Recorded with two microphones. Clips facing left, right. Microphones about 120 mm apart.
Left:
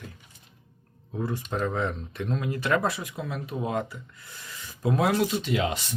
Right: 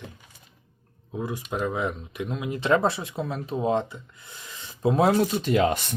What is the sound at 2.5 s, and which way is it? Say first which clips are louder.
Speech: right 5 dB; 25° right (ahead or behind).